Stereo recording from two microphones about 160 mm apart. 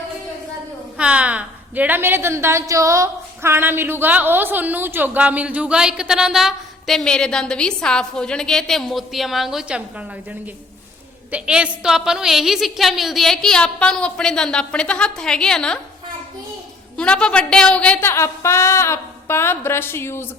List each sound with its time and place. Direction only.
0.9 s a woman's voice: 5° right (ahead or behind)
11.3 s a woman's voice: 5° right (ahead or behind)
17.0 s a woman's voice: 5° left (ahead or behind)